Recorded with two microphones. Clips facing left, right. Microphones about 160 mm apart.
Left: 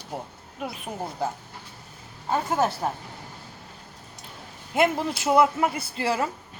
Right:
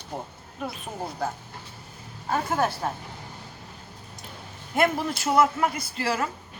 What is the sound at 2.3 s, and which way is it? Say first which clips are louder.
Speech: left 1 dB; 20° left (ahead or behind).